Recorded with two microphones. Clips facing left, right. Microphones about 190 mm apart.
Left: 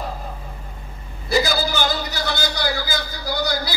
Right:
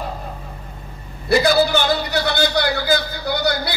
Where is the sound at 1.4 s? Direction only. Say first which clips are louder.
Right 6 dB; 60° right (ahead or behind).